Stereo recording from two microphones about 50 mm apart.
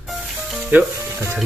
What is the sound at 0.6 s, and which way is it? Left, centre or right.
Music, right.